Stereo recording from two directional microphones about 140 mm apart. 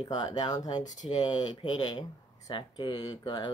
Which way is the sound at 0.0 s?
30° left (ahead or behind).